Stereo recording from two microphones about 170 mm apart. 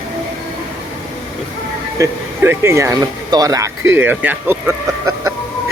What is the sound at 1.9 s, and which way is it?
Speech, 15° right (ahead or behind).